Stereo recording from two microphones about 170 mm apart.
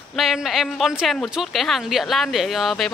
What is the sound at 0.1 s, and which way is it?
A woman's voice, centre (ahead or behind).